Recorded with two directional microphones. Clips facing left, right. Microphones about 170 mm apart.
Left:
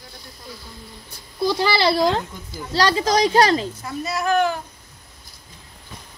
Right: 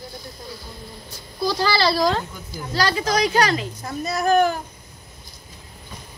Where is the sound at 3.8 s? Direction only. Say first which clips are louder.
Right 1 dB; 40° right (ahead or behind).